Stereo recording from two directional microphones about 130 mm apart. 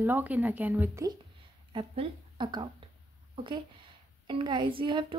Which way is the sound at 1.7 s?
45° right (ahead or behind).